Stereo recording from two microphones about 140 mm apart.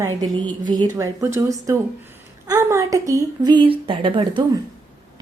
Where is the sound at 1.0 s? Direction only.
20° right (ahead or behind); by 4.5 s 35° right (ahead or behind).